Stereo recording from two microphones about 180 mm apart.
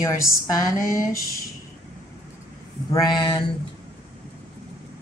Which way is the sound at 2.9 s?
20° left (ahead or behind).